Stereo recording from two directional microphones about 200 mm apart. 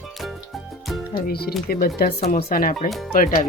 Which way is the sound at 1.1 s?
50° left (ahead or behind).